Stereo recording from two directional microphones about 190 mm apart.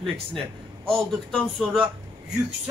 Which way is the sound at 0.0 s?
Centre (ahead or behind).